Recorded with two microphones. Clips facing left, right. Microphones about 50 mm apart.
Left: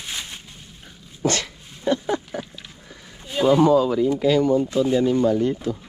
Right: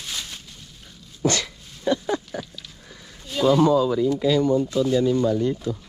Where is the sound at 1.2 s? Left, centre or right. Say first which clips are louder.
Even; left.